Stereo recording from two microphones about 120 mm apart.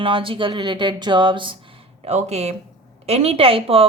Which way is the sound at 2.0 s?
70° right (ahead or behind).